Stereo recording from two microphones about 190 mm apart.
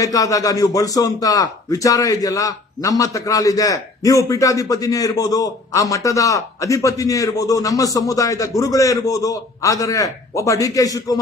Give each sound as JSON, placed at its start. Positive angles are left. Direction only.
{"t": 0.0, "sound": "speech", "side_deg": 20}